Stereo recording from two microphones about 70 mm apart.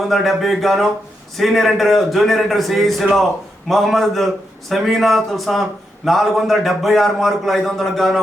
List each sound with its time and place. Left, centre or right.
0.1 s a man's voice: centre